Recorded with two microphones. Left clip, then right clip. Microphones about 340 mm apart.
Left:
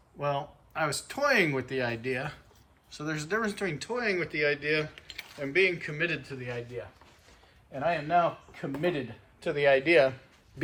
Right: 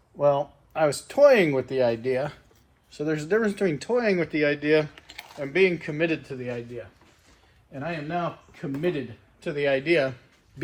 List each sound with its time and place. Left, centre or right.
0.2 s speech: centre
2.9 s speech: left
3.2 s speech: centre
7.7 s speech: left